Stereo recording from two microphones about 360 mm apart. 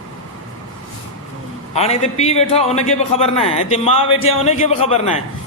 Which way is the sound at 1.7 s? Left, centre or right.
Centre.